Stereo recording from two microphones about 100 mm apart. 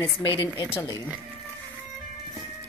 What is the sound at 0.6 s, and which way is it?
Speech, 70° left (ahead or behind).